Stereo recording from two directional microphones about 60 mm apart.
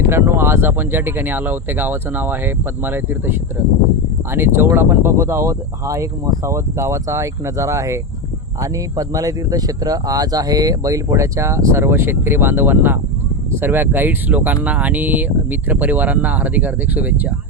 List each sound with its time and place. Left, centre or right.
0.1 s speech: right
8.6 s speech: right